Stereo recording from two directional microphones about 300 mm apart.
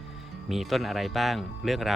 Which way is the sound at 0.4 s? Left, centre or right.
Centre.